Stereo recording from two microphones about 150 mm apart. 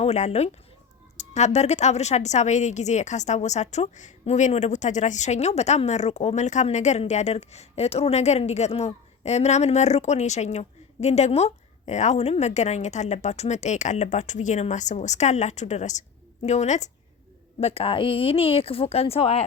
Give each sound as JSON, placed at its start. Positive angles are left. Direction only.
{"t": 0.0, "sound": "a woman's voice", "side_deg": 45}
{"t": 17.6, "sound": "speech", "side_deg": 40}